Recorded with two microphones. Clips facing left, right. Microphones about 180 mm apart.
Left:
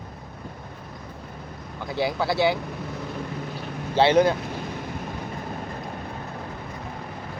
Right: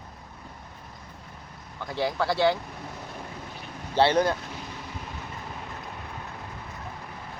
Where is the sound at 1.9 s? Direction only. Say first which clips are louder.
Left 2 dB; 10° left (ahead or behind).